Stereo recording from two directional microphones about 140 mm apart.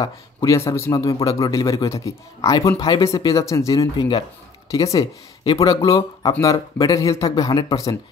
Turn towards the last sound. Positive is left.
turn(degrees=25)  # may be behind; listen again after turning